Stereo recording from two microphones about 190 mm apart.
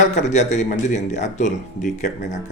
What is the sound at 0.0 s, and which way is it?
Speech, 40° left (ahead or behind).